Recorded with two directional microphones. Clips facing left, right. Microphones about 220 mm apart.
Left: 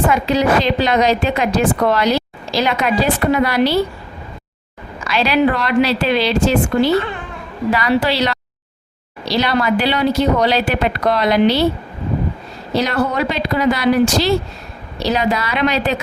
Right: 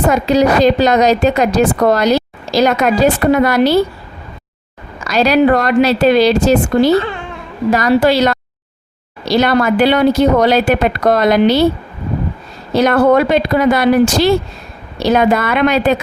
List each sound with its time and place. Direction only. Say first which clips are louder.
0.1 s a woman's voice: right 4 dB; 40° right (ahead or behind)
5.0 s a woman's voice: right 5 dB; 45° right (ahead or behind)
12.7 s a woman's voice: right 8 dB; 50° right (ahead or behind)